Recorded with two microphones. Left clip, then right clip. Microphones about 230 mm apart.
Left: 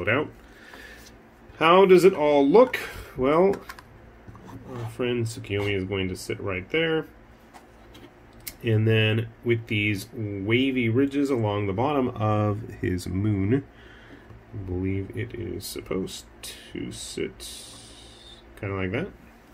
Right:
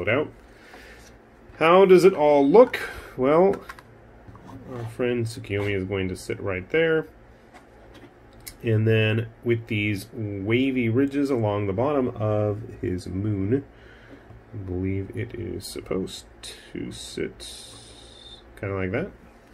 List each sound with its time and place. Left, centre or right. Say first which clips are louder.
0.0 s speech: right 1 dB; centre
1.6 s speech: right 1 dB; centre
4.9 s speech: right 2 dB; centre
8.6 s speech: right 1 dB; centre
14.8 s speech: even; centre
18.6 s speech: right 2 dB; centre